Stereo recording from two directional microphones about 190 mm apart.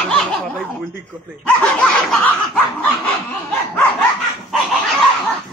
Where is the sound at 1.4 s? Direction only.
5° left (ahead or behind).